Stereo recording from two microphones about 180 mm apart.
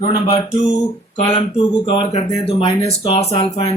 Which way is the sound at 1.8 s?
30° left (ahead or behind).